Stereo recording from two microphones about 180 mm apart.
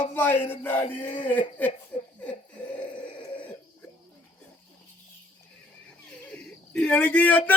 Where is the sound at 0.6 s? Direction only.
10° left (ahead or behind).